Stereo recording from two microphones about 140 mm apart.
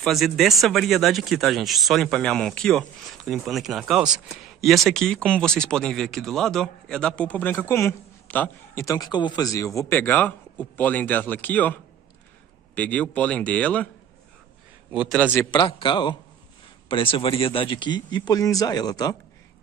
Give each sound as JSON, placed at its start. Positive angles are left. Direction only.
{"t": 0.0, "sound": "speech", "side_deg": 0}
{"t": 15.0, "sound": "speech", "side_deg": 10}
{"t": 15.5, "sound": "a man's voice", "side_deg": 35}